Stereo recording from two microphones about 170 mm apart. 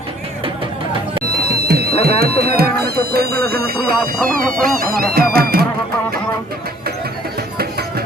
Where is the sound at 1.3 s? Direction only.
65° right (ahead or behind).